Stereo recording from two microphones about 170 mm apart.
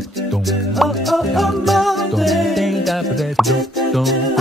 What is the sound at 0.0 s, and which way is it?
Music, centre (ahead or behind).